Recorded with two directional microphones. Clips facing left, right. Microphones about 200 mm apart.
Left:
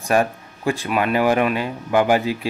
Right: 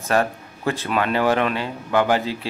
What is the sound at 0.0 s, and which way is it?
Speech, 15° left (ahead or behind).